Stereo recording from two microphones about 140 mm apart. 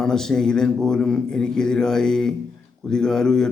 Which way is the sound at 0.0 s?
5° left (ahead or behind).